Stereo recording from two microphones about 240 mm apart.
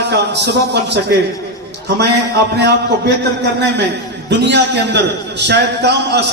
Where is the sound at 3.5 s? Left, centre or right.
Right.